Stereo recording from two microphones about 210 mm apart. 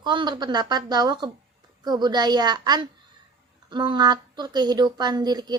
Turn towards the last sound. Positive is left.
turn(degrees=-20)  # may be behind; listen again after turning